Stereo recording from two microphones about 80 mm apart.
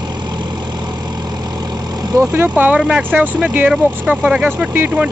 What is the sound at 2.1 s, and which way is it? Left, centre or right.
Speech, right.